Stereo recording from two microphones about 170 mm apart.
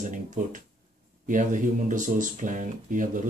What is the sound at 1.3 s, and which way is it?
Speech, 50° right (ahead or behind).